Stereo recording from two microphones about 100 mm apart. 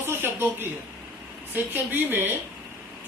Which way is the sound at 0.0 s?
25° right (ahead or behind).